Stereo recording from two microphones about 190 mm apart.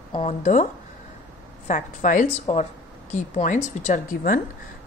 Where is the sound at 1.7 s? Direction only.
45° left (ahead or behind).